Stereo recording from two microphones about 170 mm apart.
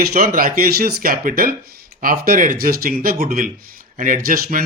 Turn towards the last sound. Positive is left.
turn(degrees=-55)  # may be behind; listen again after turning